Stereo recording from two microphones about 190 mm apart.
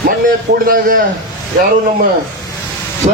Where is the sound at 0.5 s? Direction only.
45° right (ahead or behind).